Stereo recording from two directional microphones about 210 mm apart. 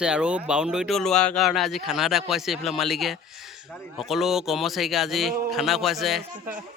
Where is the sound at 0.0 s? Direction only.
5° right (ahead or behind).